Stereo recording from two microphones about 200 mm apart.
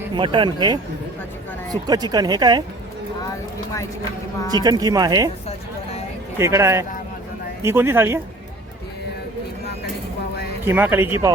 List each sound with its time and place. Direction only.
0.1 s speech: 25° right (ahead or behind)
4.5 s speech: 20° right (ahead or behind)
6.4 s speech: 15° right (ahead or behind)
10.7 s speech: 10° right (ahead or behind)